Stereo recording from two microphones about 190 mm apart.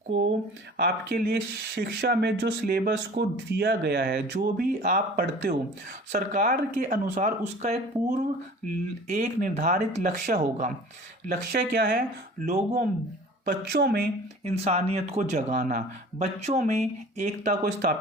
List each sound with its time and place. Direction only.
0.1 s speech: 75° right (ahead or behind)
0.8 s speech: 55° right (ahead or behind)
14.4 s speech: 35° right (ahead or behind)